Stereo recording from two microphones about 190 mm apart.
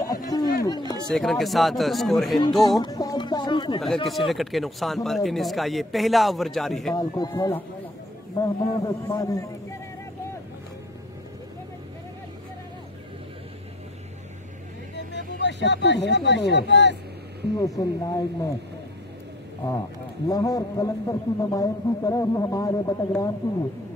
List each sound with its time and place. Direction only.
0.3 s a sound: 20° left (ahead or behind)
1.1 s a man's voice: centre (ahead or behind)
2.8 s a sound: 20° left (ahead or behind)
3.8 s a man's voice: centre (ahead or behind)
7.0 s a man's voice: 20° left (ahead or behind)
15.0 s speech: 65° left (ahead or behind)
17.6 s a man's voice: 20° left (ahead or behind)
20.2 s a man's voice: 20° left (ahead or behind)